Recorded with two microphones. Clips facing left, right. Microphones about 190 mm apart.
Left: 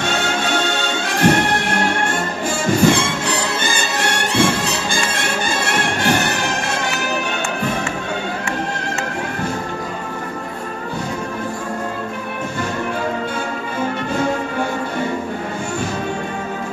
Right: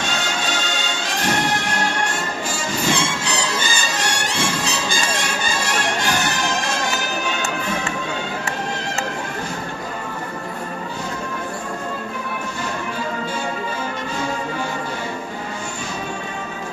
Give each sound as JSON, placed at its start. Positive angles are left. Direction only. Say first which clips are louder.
{"t": 0.0, "sound": "music", "louder": "left 4 dB", "side_deg": 55}